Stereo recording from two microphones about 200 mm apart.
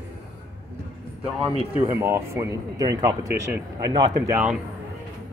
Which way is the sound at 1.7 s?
10° right (ahead or behind).